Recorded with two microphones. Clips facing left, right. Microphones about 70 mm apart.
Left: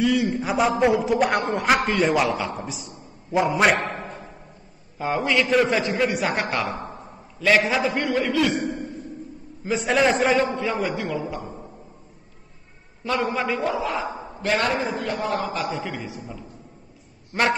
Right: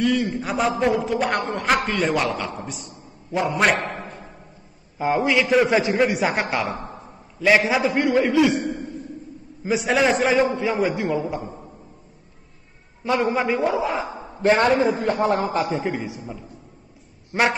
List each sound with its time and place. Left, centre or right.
0.0 s a man's voice: centre
4.9 s a man's voice: centre
5.7 s a man's voice: right
9.7 s a man's voice: centre
10.5 s a man's voice: centre
13.0 s a man's voice: centre; by 15.7 s right
15.8 s a man's voice: right
17.3 s speech: centre